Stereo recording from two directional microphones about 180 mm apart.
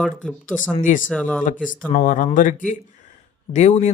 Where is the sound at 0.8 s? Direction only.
45° left (ahead or behind).